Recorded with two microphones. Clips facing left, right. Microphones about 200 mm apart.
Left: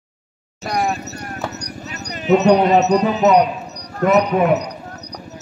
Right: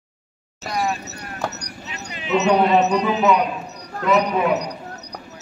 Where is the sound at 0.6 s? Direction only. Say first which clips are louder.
Left 3 dB; 50° left (ahead or behind).